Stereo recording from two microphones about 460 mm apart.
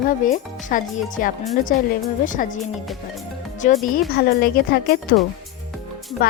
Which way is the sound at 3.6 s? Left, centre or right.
Centre.